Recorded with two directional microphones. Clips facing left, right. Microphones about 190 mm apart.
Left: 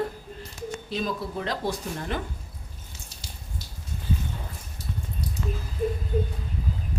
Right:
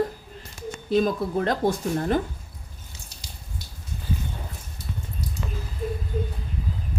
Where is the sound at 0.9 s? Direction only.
50° right (ahead or behind).